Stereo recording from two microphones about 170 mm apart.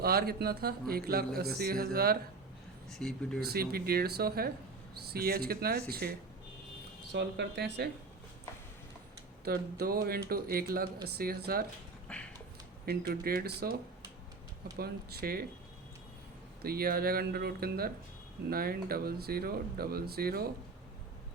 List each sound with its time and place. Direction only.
0.0 s speech: 65° right (ahead or behind)
2.9 s speech: centre (ahead or behind)
3.4 s speech: 65° right (ahead or behind)
7.1 s speech: 85° right
9.4 s speech: 65° right (ahead or behind)
12.1 s a sound: 5° left (ahead or behind)
12.8 s speech: 65° right (ahead or behind)
14.8 s speech: 65° right (ahead or behind)
16.6 s speech: 65° right (ahead or behind)